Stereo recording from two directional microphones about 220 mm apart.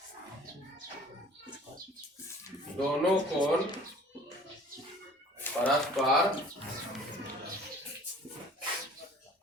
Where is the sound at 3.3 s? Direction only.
20° left (ahead or behind).